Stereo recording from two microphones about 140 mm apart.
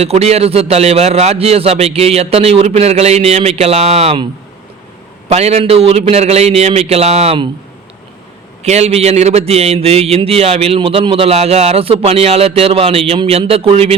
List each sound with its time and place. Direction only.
0.0 s a man's voice: 50° right (ahead or behind)
5.3 s a man's voice: 50° right (ahead or behind)
8.6 s a man's voice: 50° right (ahead or behind)